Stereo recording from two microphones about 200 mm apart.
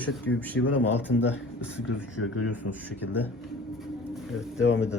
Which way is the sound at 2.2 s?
90° left.